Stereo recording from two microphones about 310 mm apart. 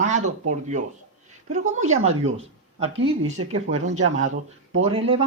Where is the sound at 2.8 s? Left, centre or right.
Right.